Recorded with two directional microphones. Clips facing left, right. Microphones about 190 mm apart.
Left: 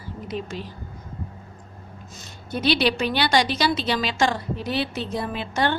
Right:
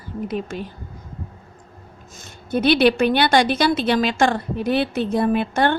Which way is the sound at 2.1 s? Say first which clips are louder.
Right 7 dB; 50° right (ahead or behind).